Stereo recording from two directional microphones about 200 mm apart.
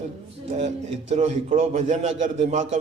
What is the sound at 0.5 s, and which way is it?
A man's voice, 35° right (ahead or behind).